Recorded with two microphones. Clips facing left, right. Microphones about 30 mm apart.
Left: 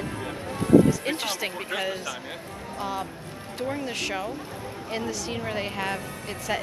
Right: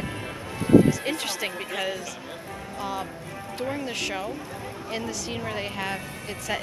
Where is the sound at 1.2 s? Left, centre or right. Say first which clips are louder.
Even; centre.